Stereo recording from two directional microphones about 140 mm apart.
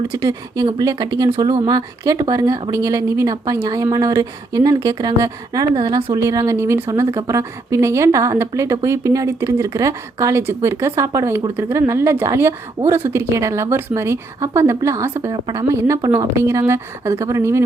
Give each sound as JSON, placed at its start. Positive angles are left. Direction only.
{"t": 0.1, "sound": "speech", "side_deg": -25}
{"t": 15.3, "sound": "a woman's voice", "side_deg": -30}
{"t": 15.7, "sound": "speech", "side_deg": -20}